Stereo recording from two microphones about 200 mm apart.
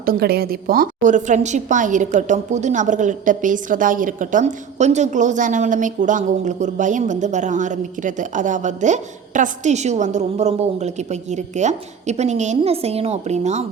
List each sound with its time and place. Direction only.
0.0 s a woman's voice: 50° right (ahead or behind)